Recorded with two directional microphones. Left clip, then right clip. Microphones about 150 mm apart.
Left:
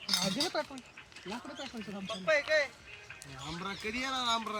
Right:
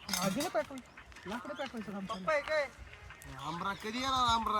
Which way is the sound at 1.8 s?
40° right (ahead or behind).